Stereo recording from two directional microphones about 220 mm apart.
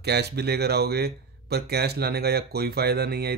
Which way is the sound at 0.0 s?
50° right (ahead or behind).